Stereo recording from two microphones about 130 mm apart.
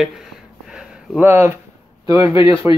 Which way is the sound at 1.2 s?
15° right (ahead or behind).